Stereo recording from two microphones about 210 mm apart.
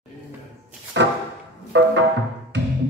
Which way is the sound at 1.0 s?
60° right (ahead or behind).